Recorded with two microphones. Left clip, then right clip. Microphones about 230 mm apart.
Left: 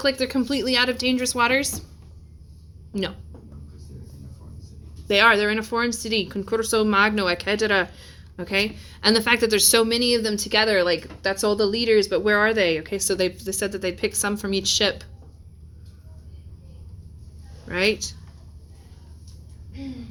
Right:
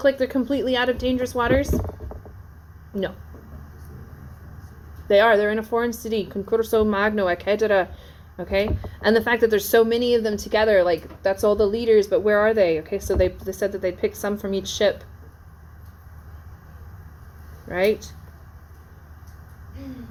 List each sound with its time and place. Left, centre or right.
0.0 s speech: left
5.0 s speech: left
17.7 s speech: left